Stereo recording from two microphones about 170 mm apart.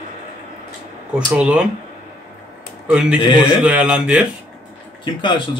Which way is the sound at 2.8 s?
5° right (ahead or behind).